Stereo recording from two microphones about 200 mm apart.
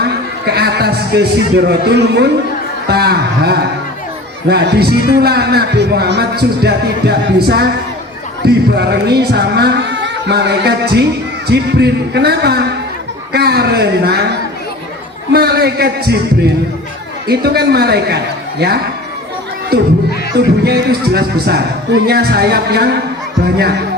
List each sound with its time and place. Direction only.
0.0 s speech: 55° right (ahead or behind)
19.7 s speech: 50° right (ahead or behind)